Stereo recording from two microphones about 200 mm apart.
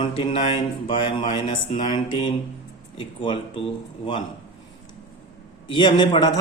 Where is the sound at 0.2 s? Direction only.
30° left (ahead or behind).